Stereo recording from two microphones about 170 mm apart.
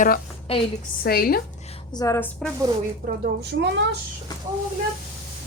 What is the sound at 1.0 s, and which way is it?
Speech, 65° left (ahead or behind).